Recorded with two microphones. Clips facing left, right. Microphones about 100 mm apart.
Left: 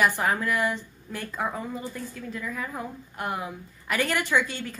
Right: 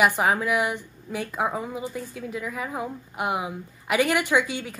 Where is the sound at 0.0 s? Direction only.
15° right (ahead or behind).